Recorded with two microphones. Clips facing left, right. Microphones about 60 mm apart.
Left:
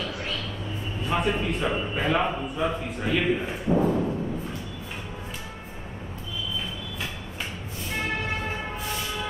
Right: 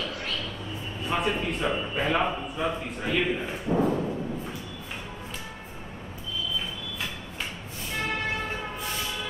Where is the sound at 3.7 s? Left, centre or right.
Left.